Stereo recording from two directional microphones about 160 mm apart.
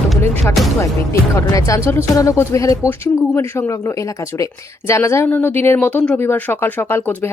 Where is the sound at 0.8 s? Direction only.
20° left (ahead or behind).